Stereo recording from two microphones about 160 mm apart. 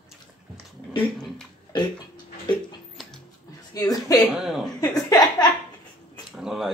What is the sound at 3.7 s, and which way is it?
Speech, 20° left (ahead or behind).